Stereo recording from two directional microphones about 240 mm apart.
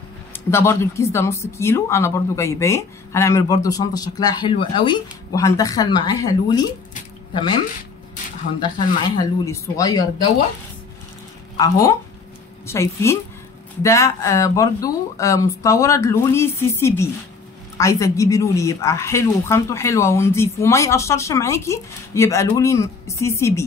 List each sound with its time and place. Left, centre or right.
0.5 s speech: centre
9.1 s speech: centre
11.5 s speech: centre